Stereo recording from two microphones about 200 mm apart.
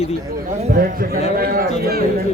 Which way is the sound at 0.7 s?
45° right (ahead or behind).